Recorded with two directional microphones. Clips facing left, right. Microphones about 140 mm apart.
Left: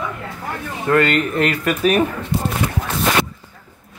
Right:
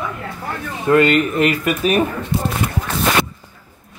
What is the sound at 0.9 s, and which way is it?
Speech, 15° right (ahead or behind).